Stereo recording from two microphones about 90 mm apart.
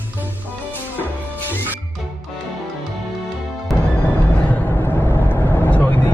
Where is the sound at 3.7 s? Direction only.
Centre (ahead or behind).